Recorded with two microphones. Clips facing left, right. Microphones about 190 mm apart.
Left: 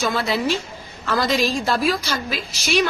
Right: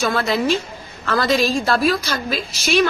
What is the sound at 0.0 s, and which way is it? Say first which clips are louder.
Speech: right 2 dB; 15° left (ahead or behind).